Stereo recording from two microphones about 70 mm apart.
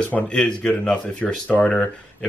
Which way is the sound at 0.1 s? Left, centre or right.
Centre.